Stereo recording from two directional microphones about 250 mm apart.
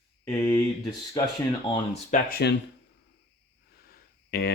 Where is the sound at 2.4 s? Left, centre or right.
Left.